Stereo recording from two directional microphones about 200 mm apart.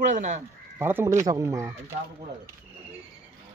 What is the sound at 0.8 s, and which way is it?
Speech, 10° right (ahead or behind).